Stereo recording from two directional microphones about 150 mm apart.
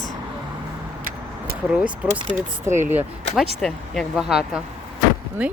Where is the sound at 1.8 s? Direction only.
10° right (ahead or behind).